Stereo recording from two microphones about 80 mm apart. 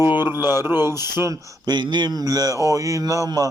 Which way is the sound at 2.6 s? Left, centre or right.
Right.